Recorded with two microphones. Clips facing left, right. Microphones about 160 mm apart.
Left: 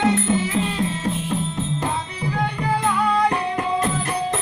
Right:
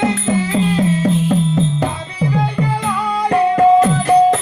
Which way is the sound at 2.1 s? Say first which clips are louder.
Right 7 dB; 90° right.